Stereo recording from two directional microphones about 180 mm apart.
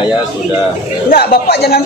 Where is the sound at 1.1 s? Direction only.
60° left (ahead or behind).